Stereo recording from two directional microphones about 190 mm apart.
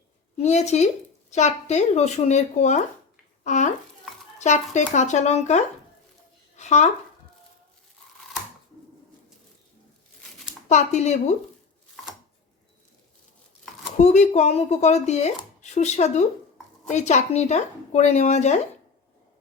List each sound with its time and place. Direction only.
0.3 s a child's voice: 35° left (ahead or behind)
10.7 s speech: 35° left (ahead or behind)
14.0 s speech: 35° left (ahead or behind)